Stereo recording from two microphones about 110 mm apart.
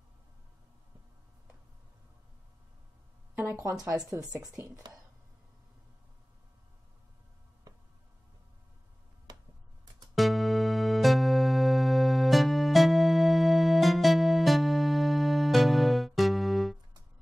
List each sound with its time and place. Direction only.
3.3 s a sound: 20° right (ahead or behind)
4.4 s speech: 35° right (ahead or behind)
10.1 s music: centre (ahead or behind)